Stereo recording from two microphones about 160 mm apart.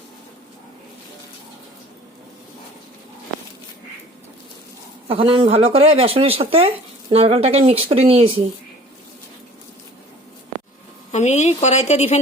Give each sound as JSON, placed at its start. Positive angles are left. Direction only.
{"t": 5.0, "sound": "speech", "side_deg": -35}
{"t": 11.1, "sound": "speech", "side_deg": 45}